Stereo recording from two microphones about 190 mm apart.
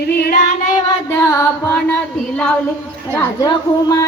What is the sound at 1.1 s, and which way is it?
Music, 15° left (ahead or behind).